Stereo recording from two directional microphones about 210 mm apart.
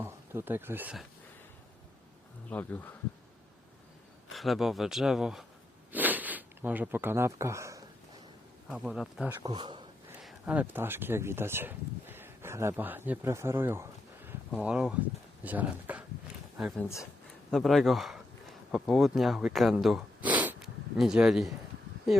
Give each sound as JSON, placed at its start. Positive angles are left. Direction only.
{"t": 0.0, "sound": "speech", "side_deg": -10}
{"t": 2.5, "sound": "speech", "side_deg": 5}
{"t": 4.3, "sound": "speech", "side_deg": 0}
{"t": 8.7, "sound": "speech", "side_deg": 0}
{"t": 9.5, "sound": "speech", "side_deg": -20}
{"t": 10.2, "sound": "speech", "side_deg": -5}
{"t": 14.3, "sound": "a sound", "side_deg": -5}
{"t": 15.4, "sound": "speech", "side_deg": -5}